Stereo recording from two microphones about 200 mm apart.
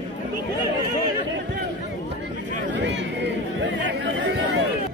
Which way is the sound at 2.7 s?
60° right (ahead or behind).